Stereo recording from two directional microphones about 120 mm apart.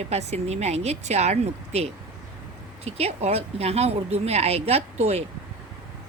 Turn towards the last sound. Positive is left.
turn(degrees=-60)  # may be behind; listen again after turning